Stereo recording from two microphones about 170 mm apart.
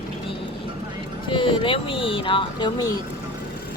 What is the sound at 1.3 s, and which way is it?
Speech, 30° left (ahead or behind).